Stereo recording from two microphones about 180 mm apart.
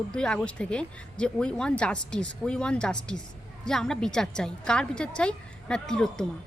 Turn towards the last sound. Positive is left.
turn(degrees=5)  # may be behind; listen again after turning